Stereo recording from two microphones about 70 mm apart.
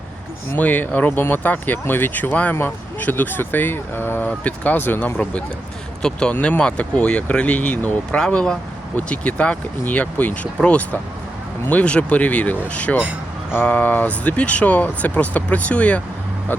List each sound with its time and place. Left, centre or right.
0.5 s speech: left
6.0 s speech: centre